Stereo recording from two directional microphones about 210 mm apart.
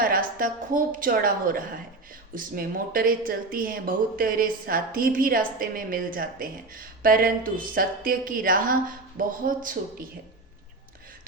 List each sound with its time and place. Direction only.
0.0 s a woman's voice: 45° right (ahead or behind)